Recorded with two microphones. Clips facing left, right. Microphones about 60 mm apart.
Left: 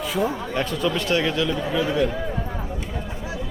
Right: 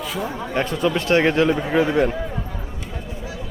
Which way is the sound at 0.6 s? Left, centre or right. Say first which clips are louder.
Right 4 dB; right.